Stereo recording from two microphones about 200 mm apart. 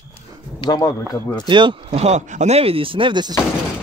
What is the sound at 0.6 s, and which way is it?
Speech, 20° left (ahead or behind).